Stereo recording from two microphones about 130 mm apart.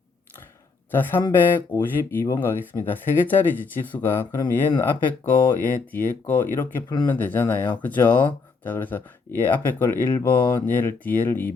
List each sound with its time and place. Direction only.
0.9 s speech: 15° left (ahead or behind)